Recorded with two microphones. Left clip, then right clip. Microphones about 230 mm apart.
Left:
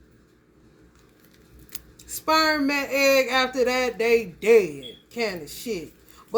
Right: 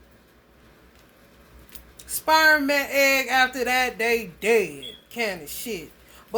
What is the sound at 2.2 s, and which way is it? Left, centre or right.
A woman's voice, centre.